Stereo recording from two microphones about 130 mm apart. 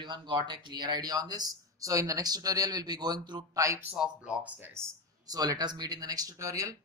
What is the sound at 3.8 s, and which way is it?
Speech, 5° right (ahead or behind).